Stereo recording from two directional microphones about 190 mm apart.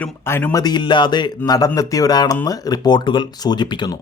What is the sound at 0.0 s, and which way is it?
A man's voice, 10° left (ahead or behind).